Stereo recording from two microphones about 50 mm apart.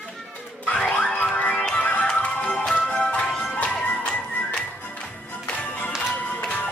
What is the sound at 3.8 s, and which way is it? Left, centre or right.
Music, left.